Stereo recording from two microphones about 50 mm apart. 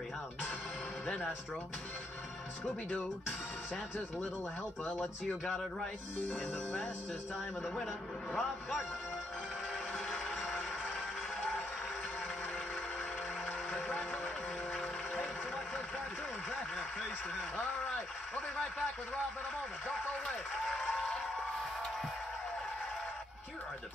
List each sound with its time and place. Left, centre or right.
2.9 s speech: centre
5.0 s speech: centre
6.1 s speech: left
8.3 s speech: centre
13.5 s music: left
20.2 s speech: centre
20.8 s a sound: centre